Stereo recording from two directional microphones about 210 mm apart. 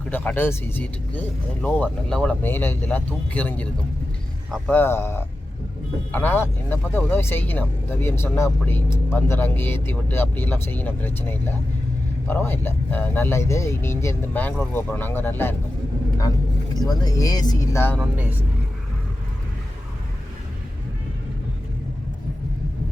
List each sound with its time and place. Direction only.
0.1 s speech: 10° left (ahead or behind)
16.8 s speech: 20° left (ahead or behind)
18.0 s speech: 10° right (ahead or behind)